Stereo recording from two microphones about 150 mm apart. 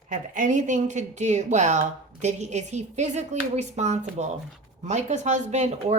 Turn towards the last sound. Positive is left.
turn(degrees=-50)  # may be behind; listen again after turning